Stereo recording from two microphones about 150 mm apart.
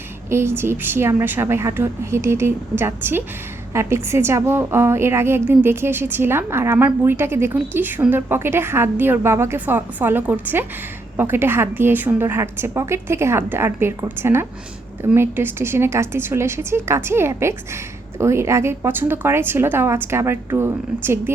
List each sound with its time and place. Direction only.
0.3 s a woman's voice: 15° right (ahead or behind)